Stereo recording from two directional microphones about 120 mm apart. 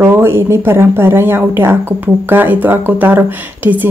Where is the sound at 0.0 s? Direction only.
20° right (ahead or behind).